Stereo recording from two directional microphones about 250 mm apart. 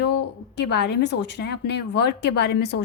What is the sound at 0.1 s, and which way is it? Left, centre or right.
A woman's voice, left.